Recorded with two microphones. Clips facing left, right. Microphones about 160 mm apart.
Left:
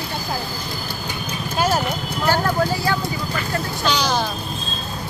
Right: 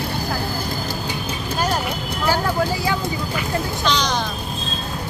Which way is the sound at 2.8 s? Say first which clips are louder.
Even; 15° right (ahead or behind).